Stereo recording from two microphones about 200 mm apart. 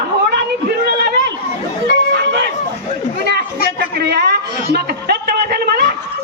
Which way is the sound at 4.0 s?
55° right (ahead or behind).